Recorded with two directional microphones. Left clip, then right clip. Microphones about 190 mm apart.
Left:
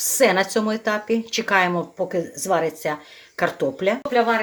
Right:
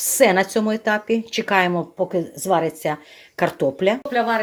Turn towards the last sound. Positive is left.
turn(degrees=-15)  # may be behind; listen again after turning